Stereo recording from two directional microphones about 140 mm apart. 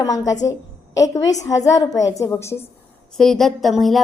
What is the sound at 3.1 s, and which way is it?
Speech, 5° left (ahead or behind).